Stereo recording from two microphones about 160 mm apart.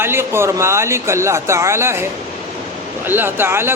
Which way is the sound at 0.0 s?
15° right (ahead or behind).